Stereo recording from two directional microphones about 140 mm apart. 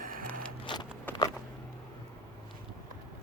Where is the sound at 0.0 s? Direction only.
85° right.